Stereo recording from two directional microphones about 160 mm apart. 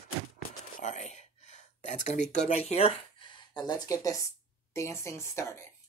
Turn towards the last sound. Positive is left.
turn(degrees=15)  # may be behind; listen again after turning